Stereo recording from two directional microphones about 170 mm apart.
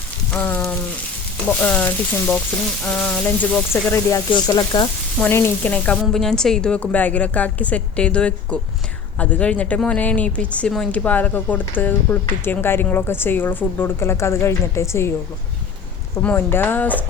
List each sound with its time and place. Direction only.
0.3 s speech: 10° left (ahead or behind)
4.3 s speech: 25° left (ahead or behind)
5.2 s speech: 15° left (ahead or behind)
16.2 s speech: 10° left (ahead or behind)